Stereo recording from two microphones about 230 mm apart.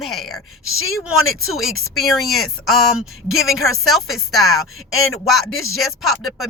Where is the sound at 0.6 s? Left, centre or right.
Left.